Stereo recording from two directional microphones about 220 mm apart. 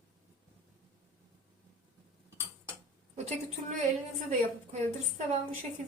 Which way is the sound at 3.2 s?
30° right (ahead or behind).